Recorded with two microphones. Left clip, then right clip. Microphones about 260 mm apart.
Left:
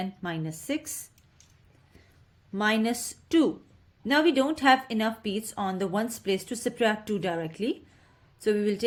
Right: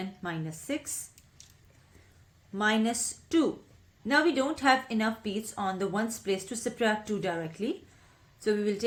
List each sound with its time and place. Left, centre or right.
0.2 s speech: left
2.5 s speech: left